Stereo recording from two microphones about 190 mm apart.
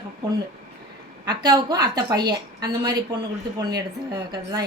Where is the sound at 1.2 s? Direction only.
20° right (ahead or behind).